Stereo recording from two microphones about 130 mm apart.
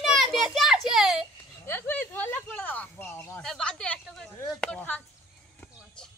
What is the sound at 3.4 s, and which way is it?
Speech, 5° left (ahead or behind).